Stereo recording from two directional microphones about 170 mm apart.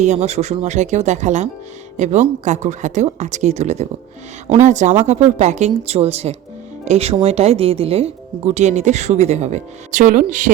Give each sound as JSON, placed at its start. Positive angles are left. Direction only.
{"t": 0.0, "sound": "speech", "side_deg": -40}